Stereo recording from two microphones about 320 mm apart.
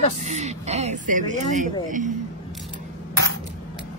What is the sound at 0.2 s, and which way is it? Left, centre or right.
Speech, right.